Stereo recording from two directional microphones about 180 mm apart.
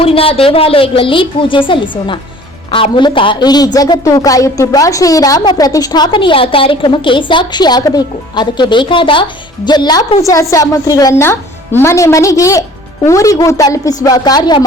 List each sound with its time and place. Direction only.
0.0 s a woman's voice: 30° left (ahead or behind)